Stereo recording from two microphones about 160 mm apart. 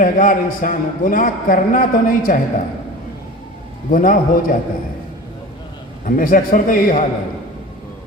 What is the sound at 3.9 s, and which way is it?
Speech, 60° left (ahead or behind).